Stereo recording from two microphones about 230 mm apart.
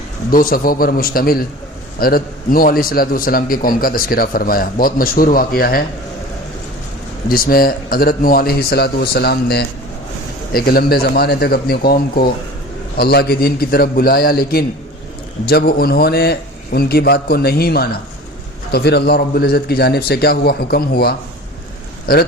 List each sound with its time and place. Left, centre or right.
0.3 s a man's voice: left
7.3 s a man's voice: left